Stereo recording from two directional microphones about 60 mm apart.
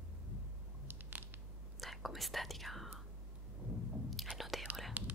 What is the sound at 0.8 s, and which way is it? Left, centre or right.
Biting, right.